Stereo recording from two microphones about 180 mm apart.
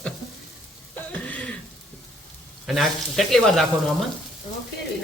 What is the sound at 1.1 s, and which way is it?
Throat clearing, 5° left (ahead or behind).